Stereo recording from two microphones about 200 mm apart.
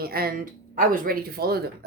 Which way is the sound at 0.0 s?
50° right (ahead or behind).